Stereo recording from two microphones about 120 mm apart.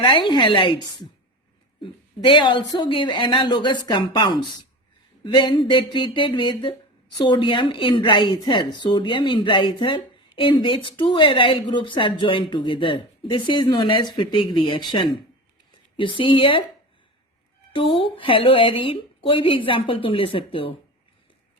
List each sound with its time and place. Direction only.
0.0 s a woman's voice: 45° left (ahead or behind)
17.7 s a woman's voice: 45° left (ahead or behind)